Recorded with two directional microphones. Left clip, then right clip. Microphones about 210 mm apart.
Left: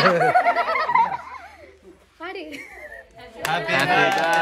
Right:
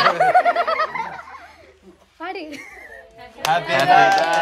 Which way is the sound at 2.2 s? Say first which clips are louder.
Right 3 dB; 50° right (ahead or behind).